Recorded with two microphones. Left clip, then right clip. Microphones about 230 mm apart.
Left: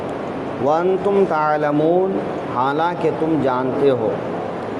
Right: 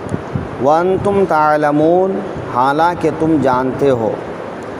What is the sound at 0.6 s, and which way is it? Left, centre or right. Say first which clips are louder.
Speech: right 5 dB; right.